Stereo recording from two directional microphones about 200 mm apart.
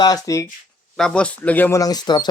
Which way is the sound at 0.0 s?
20° left (ahead or behind).